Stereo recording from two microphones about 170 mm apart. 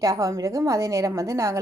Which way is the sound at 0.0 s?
20° right (ahead or behind).